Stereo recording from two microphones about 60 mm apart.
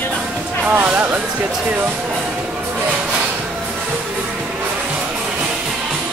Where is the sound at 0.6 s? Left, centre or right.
Right.